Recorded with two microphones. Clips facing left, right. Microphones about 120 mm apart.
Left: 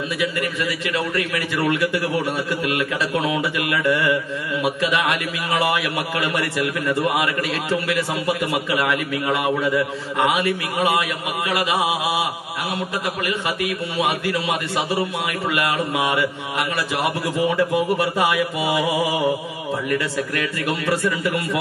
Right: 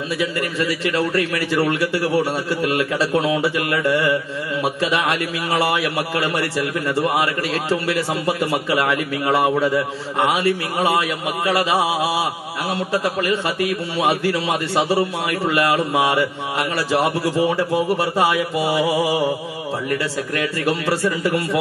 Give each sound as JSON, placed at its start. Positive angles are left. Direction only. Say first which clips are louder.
{"t": 0.2, "sound": "a man's voice", "louder": "right 2 dB", "side_deg": -30}